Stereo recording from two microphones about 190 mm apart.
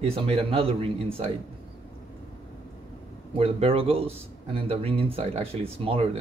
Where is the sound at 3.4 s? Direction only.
30° right (ahead or behind).